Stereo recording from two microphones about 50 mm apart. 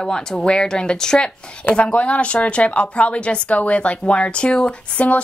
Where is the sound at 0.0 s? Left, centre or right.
Centre.